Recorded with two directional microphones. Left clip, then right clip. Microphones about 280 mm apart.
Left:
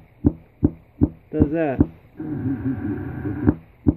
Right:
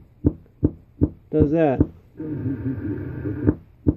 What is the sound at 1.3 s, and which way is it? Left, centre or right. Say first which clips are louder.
Speech: right 4 dB; centre.